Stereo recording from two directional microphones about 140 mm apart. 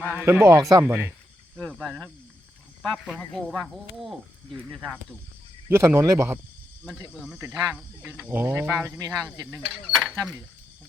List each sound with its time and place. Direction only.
0.1 s speech: 15° right (ahead or behind)
1.5 s speech: 5° left (ahead or behind)
5.6 s speech: 20° right (ahead or behind)
7.1 s speech: centre (ahead or behind); by 9.5 s 25° right (ahead or behind)
9.5 s speech: 5° right (ahead or behind)